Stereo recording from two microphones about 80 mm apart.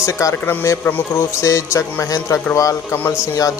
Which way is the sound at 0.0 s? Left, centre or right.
Left.